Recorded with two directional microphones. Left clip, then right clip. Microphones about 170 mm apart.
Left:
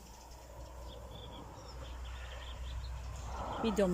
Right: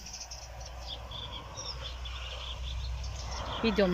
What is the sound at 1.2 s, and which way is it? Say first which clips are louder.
Bird: right 9 dB; 10° left (ahead or behind).